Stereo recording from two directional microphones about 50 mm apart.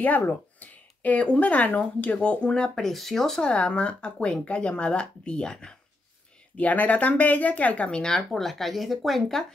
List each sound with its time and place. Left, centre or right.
0.0 s speech: left; by 2.7 s centre
2.7 s speech: centre
3.4 s speech: left
6.5 s speech: left
8.4 s speech: centre